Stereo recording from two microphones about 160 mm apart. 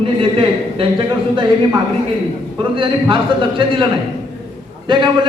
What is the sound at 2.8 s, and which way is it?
A man's voice, 30° right (ahead or behind).